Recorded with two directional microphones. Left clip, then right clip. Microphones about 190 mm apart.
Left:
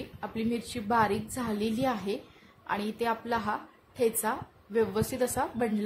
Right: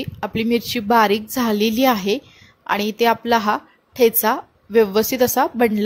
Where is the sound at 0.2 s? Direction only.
45° right (ahead or behind).